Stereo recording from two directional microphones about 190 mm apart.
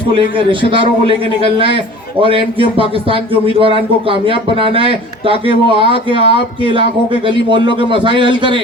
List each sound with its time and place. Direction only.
0.1 s speech: 25° right (ahead or behind)